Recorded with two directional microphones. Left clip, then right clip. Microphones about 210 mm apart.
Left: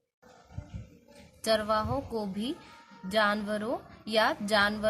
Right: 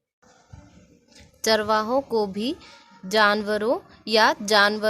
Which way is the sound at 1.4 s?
45° right (ahead or behind).